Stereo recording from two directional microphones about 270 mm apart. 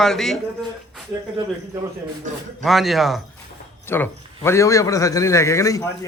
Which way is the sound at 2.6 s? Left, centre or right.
Centre.